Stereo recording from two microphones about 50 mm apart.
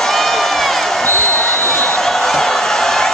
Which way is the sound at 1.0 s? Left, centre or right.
Left.